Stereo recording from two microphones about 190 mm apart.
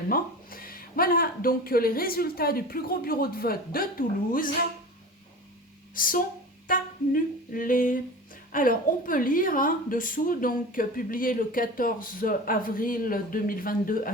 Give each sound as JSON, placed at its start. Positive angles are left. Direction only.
{"t": 0.1, "sound": "a woman's voice", "side_deg": 50}
{"t": 5.9, "sound": "a woman's voice", "side_deg": 45}